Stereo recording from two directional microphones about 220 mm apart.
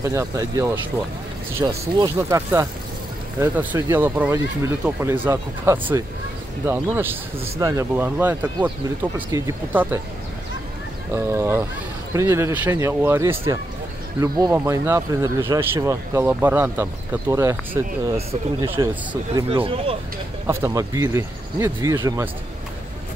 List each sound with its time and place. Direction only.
0.0 s speech: 15° right (ahead or behind)
11.1 s speech: 10° right (ahead or behind)
18.8 s speech: 15° right (ahead or behind)